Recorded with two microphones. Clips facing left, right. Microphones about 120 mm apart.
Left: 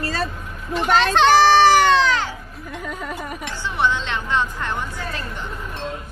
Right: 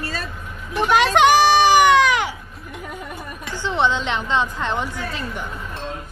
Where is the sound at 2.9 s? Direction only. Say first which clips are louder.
Left 4 dB; 90° left.